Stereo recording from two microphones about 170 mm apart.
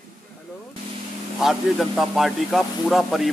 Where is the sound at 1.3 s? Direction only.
Centre (ahead or behind).